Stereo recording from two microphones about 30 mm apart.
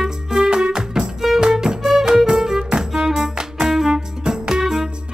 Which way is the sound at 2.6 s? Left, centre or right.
Right.